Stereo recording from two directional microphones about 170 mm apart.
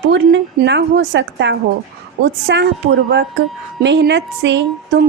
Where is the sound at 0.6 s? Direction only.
90° right.